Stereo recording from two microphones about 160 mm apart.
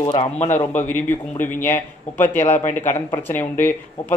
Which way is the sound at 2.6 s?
50° left (ahead or behind).